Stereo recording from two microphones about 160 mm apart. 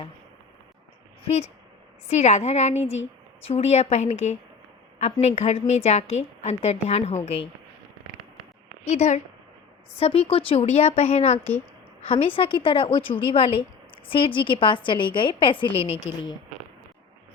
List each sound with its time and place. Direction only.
2.0 s a woman's voice: 45° left (ahead or behind)
8.9 s a woman's voice: 45° left (ahead or behind)